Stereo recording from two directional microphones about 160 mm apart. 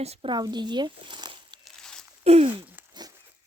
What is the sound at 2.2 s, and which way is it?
Speech, 40° right (ahead or behind).